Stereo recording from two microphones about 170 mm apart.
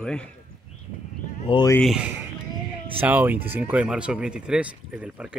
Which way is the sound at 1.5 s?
30° left (ahead or behind).